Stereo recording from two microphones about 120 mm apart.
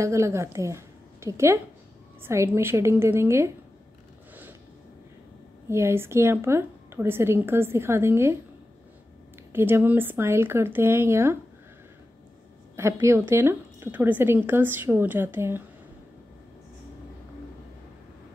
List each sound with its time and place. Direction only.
0.0 s a woman's voice: 25° right (ahead or behind)
5.7 s speech: 20° right (ahead or behind)
9.5 s speech: 20° right (ahead or behind)
12.7 s speech: 25° right (ahead or behind)